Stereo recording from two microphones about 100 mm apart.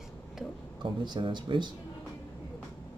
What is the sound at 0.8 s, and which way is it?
Speech, 50° right (ahead or behind).